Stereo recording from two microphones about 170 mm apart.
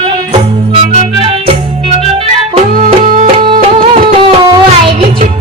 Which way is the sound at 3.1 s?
45° right (ahead or behind).